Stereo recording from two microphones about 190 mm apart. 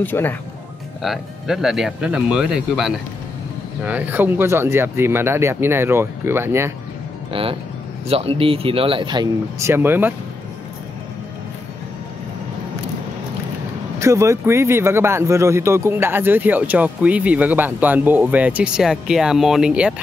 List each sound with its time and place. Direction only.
0.0 s speech: 10° left (ahead or behind)
1.0 s speech: centre (ahead or behind)
7.3 s speech: 30° right (ahead or behind); by 10.1 s 10° right (ahead or behind)
13.9 s speech: 15° right (ahead or behind)